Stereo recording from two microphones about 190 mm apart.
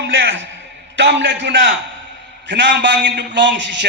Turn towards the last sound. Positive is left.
turn(degrees=-70)  # may be behind; listen again after turning